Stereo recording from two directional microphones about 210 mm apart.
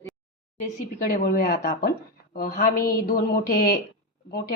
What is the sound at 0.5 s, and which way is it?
A woman's voice, 40° left (ahead or behind).